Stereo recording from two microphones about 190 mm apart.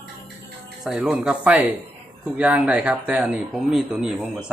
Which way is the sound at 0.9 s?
5° right (ahead or behind).